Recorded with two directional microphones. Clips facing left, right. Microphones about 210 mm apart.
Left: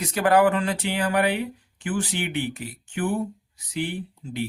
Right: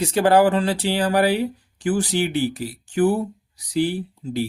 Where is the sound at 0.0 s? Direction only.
30° right (ahead or behind).